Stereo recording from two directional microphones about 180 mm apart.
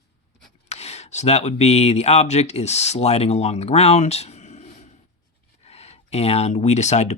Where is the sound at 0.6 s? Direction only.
35° left (ahead or behind).